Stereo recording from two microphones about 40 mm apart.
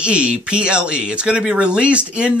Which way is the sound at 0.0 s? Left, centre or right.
Right.